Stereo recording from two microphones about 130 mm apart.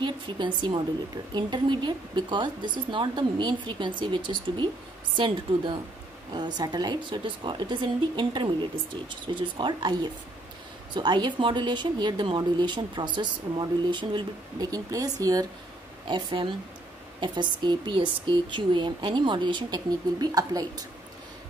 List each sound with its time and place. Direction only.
0.0 s speech: 40° right (ahead or behind)
11.0 s speech: 35° right (ahead or behind)
16.1 s speech: 40° right (ahead or behind)